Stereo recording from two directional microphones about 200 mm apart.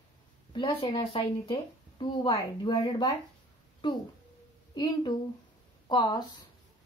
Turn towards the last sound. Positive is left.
turn(degrees=20)  # may be behind; listen again after turning